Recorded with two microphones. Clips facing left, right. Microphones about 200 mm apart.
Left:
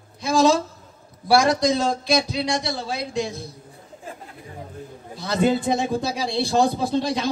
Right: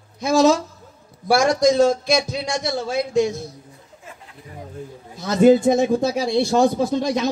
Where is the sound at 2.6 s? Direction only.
45° right (ahead or behind).